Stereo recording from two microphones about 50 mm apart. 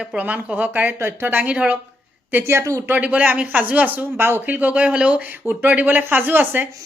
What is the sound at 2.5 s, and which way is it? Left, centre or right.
Speech, right.